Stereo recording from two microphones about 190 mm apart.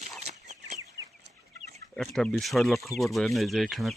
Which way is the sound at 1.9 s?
Centre (ahead or behind).